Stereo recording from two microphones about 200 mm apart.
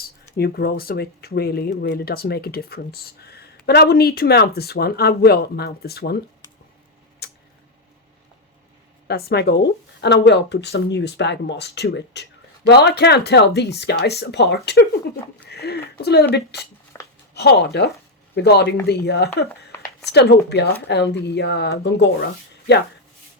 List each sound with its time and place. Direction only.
0.0 s speech: 50° left (ahead or behind)
9.0 s speech: 55° left (ahead or behind)